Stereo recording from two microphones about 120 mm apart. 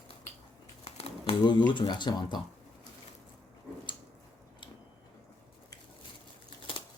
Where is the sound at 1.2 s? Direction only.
40° left (ahead or behind).